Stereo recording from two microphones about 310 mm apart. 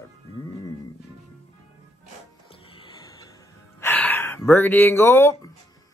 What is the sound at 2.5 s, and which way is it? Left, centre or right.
Music, centre.